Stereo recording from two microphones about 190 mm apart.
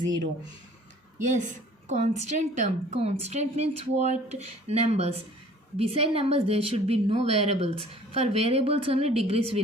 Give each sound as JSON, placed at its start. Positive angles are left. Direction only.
{"t": 1.9, "sound": "a woman's voice", "side_deg": -40}